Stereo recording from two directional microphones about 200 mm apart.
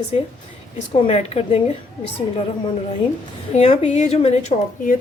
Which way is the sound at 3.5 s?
30° left (ahead or behind).